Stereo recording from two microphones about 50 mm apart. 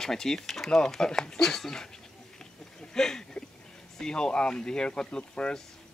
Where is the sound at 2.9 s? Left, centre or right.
Centre.